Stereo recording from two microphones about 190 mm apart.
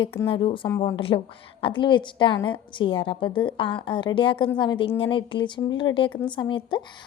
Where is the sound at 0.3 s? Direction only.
25° left (ahead or behind).